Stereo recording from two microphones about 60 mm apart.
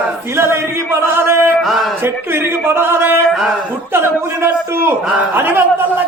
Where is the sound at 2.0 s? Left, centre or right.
Right.